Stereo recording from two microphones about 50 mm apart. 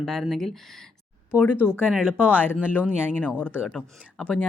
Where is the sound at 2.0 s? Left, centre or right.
Right.